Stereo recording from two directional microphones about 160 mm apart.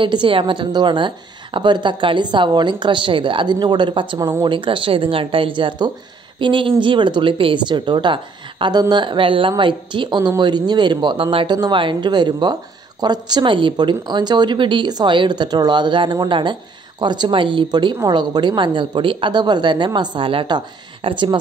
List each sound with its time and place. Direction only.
0.0 s a woman's voice: 30° right (ahead or behind)